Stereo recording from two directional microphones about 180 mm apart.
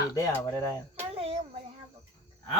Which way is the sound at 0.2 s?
15° left (ahead or behind).